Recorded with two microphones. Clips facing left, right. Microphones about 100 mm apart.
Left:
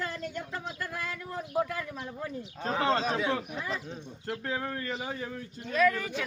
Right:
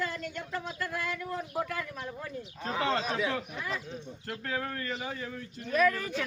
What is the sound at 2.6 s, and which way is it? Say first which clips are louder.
A man's voice: left 3 dB; 35° left (ahead or behind).